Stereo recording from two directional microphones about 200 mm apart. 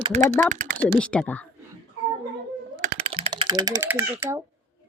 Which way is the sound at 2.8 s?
30° right (ahead or behind).